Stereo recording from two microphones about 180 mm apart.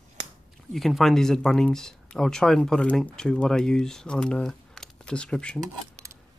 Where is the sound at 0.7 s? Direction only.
Centre (ahead or behind).